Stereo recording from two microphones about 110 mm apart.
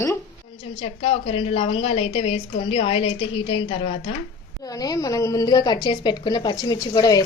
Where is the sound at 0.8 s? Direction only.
65° left (ahead or behind).